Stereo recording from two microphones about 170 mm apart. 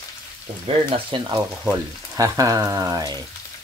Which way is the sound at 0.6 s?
25° right (ahead or behind).